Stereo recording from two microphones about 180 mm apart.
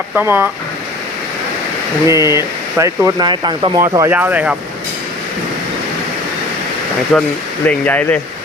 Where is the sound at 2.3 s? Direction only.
15° right (ahead or behind).